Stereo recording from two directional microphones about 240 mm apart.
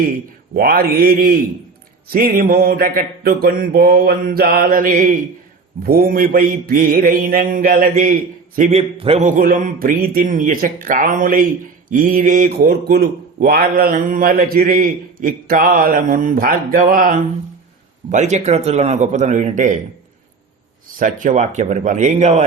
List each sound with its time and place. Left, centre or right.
0.5 s a man's voice: right
21.0 s a man's voice: right